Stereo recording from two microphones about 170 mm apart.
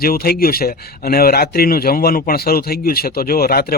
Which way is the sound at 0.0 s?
60° left (ahead or behind).